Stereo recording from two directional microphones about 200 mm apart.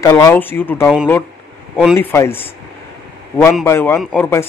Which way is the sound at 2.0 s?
10° left (ahead or behind).